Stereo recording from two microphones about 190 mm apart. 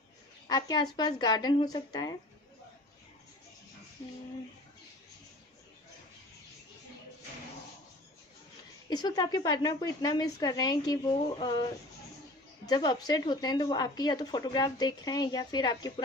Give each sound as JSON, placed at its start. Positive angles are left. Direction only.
{"t": 0.5, "sound": "a woman's voice", "side_deg": 20}
{"t": 8.8, "sound": "a woman's voice", "side_deg": 20}
{"t": 12.6, "sound": "a woman's voice", "side_deg": 20}